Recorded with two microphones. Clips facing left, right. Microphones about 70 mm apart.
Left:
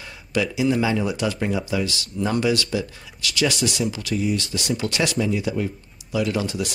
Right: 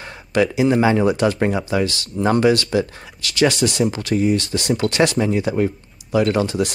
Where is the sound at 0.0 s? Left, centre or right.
Right.